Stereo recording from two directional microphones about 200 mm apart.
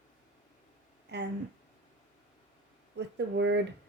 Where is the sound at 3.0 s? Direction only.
60° right (ahead or behind).